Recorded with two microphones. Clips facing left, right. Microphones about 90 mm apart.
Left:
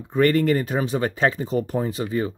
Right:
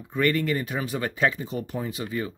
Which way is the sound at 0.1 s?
35° left (ahead or behind).